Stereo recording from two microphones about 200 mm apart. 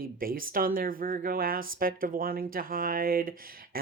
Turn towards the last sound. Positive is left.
turn(degrees=-45)  # may be behind; listen again after turning